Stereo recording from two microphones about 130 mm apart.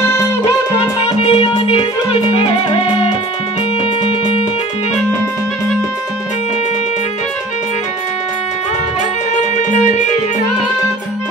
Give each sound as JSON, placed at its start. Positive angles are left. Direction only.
{"t": 1.0, "sound": "music", "side_deg": 50}
{"t": 4.0, "sound": "music", "side_deg": 55}
{"t": 9.3, "sound": "music", "side_deg": 65}